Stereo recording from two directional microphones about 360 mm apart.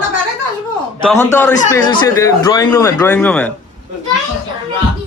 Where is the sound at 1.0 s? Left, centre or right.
Centre.